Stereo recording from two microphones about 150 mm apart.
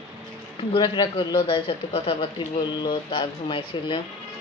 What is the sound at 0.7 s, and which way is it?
Speech, 30° left (ahead or behind).